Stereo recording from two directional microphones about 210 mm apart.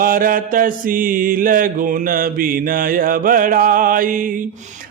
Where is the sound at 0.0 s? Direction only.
40° right (ahead or behind).